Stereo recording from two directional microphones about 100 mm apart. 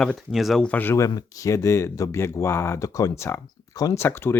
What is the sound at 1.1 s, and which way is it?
Speech, 40° left (ahead or behind).